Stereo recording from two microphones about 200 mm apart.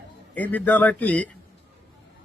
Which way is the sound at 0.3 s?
10° left (ahead or behind).